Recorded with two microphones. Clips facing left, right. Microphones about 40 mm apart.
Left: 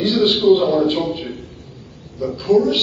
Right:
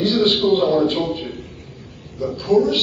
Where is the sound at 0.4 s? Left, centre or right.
Right.